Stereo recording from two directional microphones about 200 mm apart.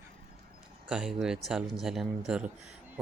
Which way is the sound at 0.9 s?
5° right (ahead or behind).